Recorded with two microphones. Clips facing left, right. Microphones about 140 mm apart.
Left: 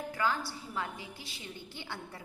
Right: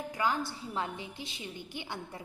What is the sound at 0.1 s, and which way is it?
A woman's voice, 15° right (ahead or behind).